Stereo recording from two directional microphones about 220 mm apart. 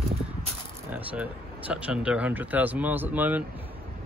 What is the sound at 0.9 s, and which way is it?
Speech, 5° right (ahead or behind).